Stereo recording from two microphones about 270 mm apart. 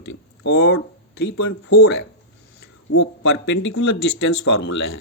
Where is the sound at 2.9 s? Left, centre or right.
Left.